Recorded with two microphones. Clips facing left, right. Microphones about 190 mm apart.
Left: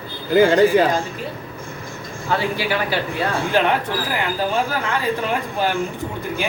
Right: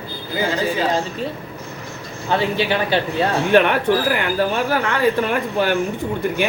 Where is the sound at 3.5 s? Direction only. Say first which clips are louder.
Right 6 dB; 65° right (ahead or behind).